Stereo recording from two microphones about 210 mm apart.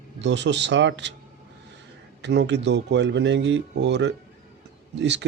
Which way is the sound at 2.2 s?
55° right (ahead or behind).